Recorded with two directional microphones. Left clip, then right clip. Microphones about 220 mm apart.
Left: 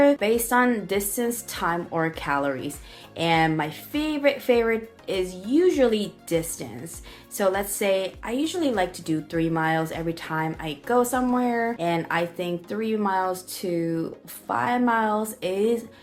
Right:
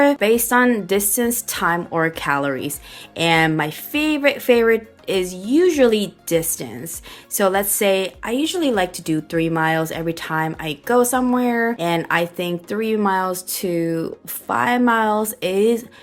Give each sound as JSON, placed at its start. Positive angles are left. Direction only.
{"t": 0.0, "sound": "a woman's voice", "side_deg": -40}